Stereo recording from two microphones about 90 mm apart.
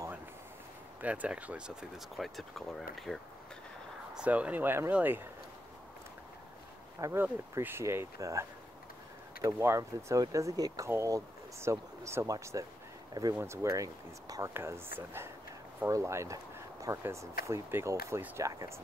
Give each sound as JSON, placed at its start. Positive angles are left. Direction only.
{"t": 1.0, "sound": "speech", "side_deg": -15}
{"t": 2.0, "sound": "speech", "side_deg": 0}
{"t": 4.1, "sound": "speech", "side_deg": -10}
{"t": 7.2, "sound": "speech", "side_deg": -25}
{"t": 13.4, "sound": "speech", "side_deg": -30}